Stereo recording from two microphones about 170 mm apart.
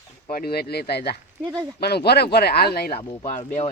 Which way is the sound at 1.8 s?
70° left (ahead or behind).